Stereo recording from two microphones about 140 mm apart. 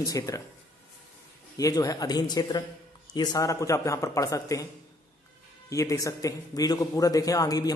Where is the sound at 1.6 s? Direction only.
25° left (ahead or behind).